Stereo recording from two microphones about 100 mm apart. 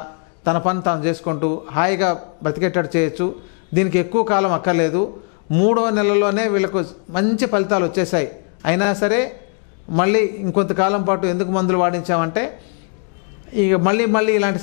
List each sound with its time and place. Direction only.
0.0 s a man's voice: 15° left (ahead or behind)
13.6 s a man's voice: 15° left (ahead or behind)